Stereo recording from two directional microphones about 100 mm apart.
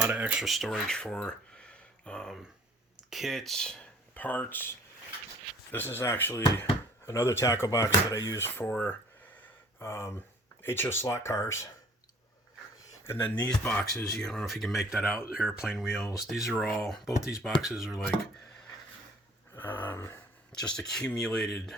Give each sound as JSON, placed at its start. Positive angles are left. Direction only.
{"t": 0.0, "sound": "speech", "side_deg": -10}
{"t": 0.4, "sound": "speech", "side_deg": 0}
{"t": 5.7, "sound": "speech", "side_deg": 20}
{"t": 13.1, "sound": "speech", "side_deg": 20}
{"t": 14.2, "sound": "speech", "side_deg": 5}
{"t": 19.5, "sound": "a sound", "side_deg": 20}
{"t": 20.6, "sound": "speech", "side_deg": 5}